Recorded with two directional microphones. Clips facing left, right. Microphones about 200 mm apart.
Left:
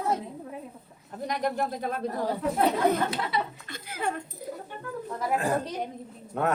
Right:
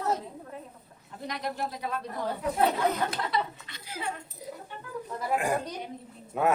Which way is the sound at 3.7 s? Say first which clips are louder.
Left 5 dB; 50° left (ahead or behind).